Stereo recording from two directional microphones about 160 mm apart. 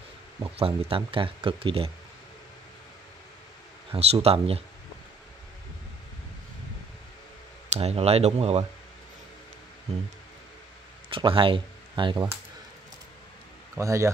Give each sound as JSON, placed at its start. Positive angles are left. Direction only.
{"t": 0.4, "sound": "speech", "side_deg": -35}
{"t": 3.9, "sound": "speech", "side_deg": -40}
{"t": 7.7, "sound": "speech", "side_deg": -40}
{"t": 11.1, "sound": "speech", "side_deg": -30}
{"t": 13.7, "sound": "speech", "side_deg": -20}